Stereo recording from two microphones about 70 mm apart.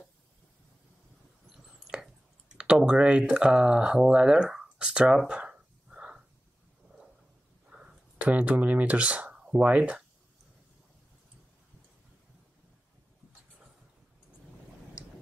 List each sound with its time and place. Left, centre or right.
2.5 s speech: centre
7.7 s speech: centre